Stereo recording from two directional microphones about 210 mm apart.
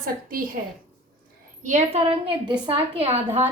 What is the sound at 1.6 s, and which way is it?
A woman's voice, 35° right (ahead or behind).